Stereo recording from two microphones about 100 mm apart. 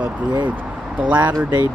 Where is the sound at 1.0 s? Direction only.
15° right (ahead or behind).